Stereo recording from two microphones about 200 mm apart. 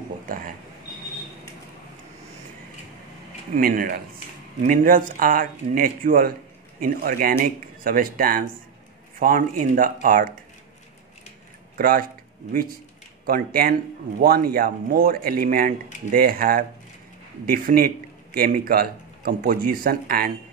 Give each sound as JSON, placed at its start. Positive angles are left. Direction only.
{"t": 3.5, "sound": "speech", "side_deg": -45}
{"t": 11.7, "sound": "speech", "side_deg": -45}
{"t": 13.2, "sound": "speech", "side_deg": -45}